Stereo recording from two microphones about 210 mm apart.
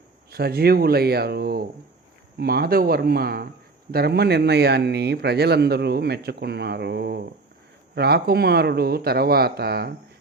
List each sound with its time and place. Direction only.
0.3 s speech: 50° right (ahead or behind)